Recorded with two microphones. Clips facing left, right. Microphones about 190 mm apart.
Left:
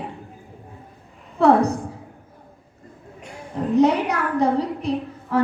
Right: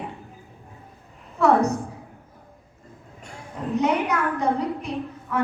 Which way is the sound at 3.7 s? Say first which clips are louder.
Left 5 dB; 35° left (ahead or behind).